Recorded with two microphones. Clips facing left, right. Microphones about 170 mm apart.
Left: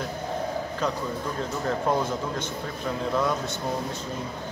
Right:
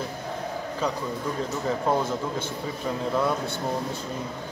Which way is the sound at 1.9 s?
10° right (ahead or behind).